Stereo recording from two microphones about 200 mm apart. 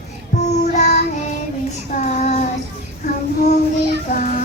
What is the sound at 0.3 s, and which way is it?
Child singing, 35° left (ahead or behind).